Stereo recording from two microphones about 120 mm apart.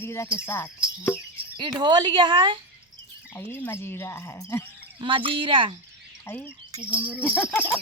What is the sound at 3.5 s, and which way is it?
Speech, 15° left (ahead or behind).